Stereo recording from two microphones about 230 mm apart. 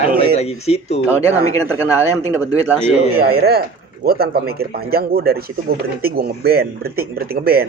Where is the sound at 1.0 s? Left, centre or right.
Centre.